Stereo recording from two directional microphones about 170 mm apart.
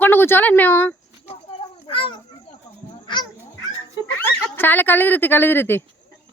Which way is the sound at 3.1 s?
25° left (ahead or behind).